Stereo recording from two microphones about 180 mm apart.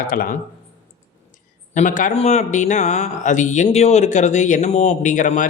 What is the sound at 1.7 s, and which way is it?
Speech, 45° left (ahead or behind).